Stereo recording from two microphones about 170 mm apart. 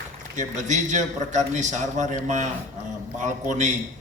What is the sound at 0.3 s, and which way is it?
A man's voice, 45° right (ahead or behind).